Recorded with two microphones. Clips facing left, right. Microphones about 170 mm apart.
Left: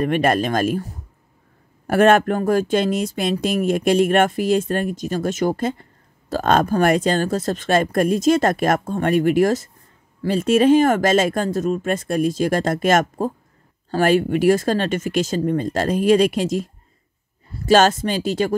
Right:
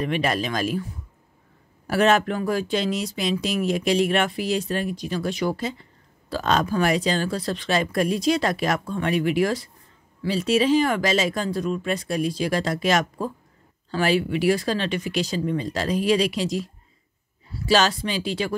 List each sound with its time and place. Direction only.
0.0 s speech: 50° left (ahead or behind)